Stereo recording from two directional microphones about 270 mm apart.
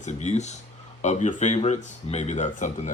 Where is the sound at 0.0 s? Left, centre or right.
Left.